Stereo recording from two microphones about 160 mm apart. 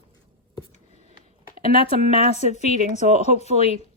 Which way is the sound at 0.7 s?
45° left (ahead or behind).